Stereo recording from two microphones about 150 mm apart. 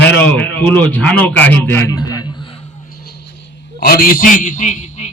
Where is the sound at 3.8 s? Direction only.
85° left; by 5.1 s 55° left (ahead or behind).